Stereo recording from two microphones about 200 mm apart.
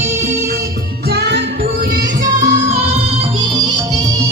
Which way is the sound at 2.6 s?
30° right (ahead or behind).